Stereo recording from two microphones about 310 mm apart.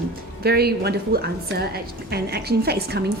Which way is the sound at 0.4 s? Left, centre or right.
Right.